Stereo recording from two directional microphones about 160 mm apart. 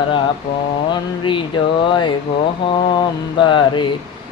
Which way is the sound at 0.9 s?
30° left (ahead or behind).